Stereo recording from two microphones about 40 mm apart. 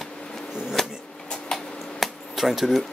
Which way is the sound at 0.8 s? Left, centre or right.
Centre.